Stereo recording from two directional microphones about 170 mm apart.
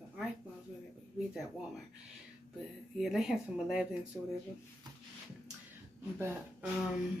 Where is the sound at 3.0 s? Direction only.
Centre (ahead or behind).